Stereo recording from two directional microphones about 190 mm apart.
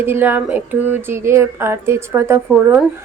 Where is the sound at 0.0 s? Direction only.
10° right (ahead or behind).